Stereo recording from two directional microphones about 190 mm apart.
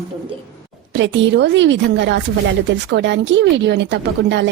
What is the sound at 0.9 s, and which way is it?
A woman's voice, 70° right (ahead or behind).